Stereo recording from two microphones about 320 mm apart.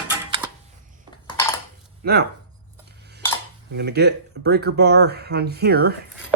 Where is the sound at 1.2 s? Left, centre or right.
Centre.